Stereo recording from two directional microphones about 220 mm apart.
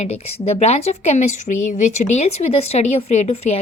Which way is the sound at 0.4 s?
30° left (ahead or behind).